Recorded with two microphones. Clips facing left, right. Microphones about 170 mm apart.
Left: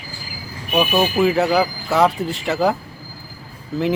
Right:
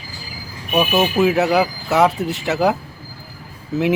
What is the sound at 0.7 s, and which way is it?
Speech, centre (ahead or behind).